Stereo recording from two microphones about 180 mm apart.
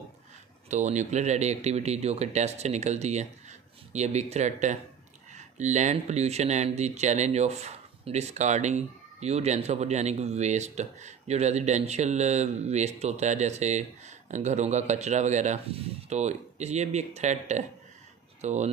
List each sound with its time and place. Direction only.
0.7 s speech: 40° right (ahead or behind)